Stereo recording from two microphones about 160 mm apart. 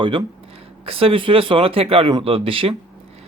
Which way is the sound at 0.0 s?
30° right (ahead or behind).